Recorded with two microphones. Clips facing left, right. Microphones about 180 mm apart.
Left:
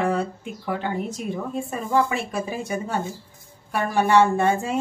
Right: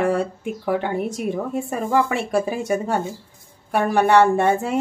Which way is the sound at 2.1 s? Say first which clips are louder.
Right 5 dB; 70° right (ahead or behind).